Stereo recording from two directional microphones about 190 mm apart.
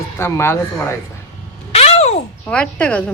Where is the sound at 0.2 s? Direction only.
15° left (ahead or behind).